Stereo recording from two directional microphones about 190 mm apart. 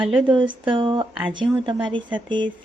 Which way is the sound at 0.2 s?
25° right (ahead or behind).